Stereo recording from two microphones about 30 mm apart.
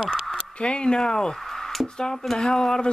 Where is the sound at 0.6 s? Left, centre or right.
Left.